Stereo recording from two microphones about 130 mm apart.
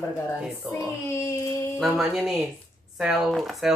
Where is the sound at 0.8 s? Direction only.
20° left (ahead or behind).